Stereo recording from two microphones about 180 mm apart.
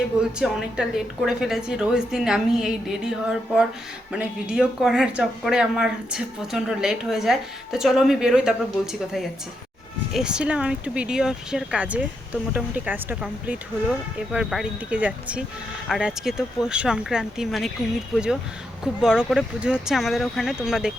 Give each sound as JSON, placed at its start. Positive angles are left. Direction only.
{"t": 0.2, "sound": "speech", "side_deg": -5}